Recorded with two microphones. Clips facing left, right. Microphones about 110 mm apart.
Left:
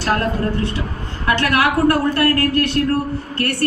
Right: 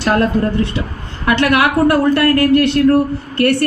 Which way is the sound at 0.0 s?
25° right (ahead or behind).